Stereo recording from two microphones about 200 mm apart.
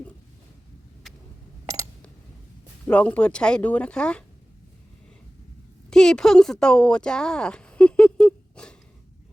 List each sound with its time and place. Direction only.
1.0 s a sound: centre (ahead or behind)
2.8 s speech: 5° left (ahead or behind)
5.9 s speech: 5° left (ahead or behind)